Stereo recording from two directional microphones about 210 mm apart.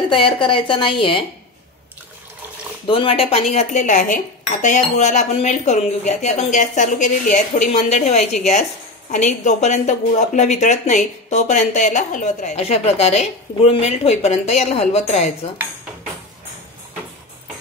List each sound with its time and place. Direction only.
0.1 s a woman's voice: 25° left (ahead or behind)
2.9 s speech: 25° left (ahead or behind)